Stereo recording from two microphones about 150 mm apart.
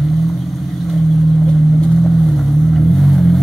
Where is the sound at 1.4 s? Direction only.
5° left (ahead or behind).